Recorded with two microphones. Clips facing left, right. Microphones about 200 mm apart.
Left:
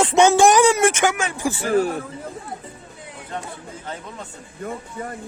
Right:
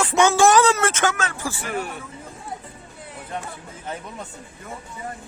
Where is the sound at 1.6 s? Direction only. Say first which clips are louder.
Left 12 dB; 35° left (ahead or behind).